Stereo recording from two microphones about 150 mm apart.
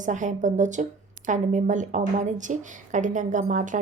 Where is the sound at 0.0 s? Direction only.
55° right (ahead or behind).